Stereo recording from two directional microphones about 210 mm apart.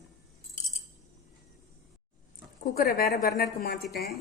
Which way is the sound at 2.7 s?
45° left (ahead or behind).